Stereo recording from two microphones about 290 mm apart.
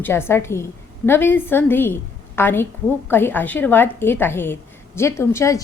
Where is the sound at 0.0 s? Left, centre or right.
Centre.